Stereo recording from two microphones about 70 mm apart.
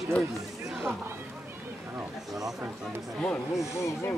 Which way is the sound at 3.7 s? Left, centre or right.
Left.